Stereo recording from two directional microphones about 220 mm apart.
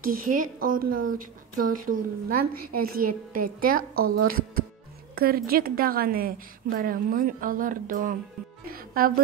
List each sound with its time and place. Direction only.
0.0 s a woman's voice: 40° right (ahead or behind)